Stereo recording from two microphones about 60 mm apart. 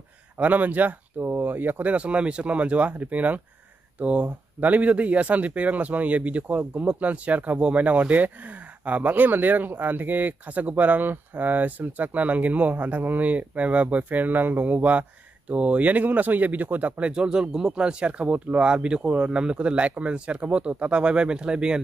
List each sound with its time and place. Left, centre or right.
0.4 s speech: right
17.1 s speech: centre